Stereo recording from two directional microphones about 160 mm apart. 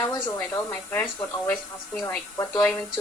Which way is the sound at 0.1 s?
15° left (ahead or behind).